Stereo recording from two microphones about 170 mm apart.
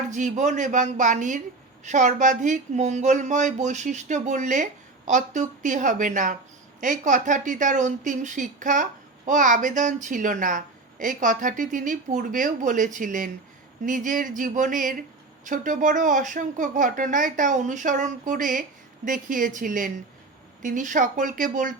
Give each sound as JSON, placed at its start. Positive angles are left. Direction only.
{"t": 0.1, "sound": "speech", "side_deg": -45}